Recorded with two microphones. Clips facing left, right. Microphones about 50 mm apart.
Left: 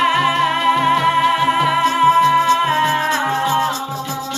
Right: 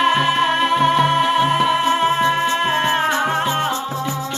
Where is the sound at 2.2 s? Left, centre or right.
Right.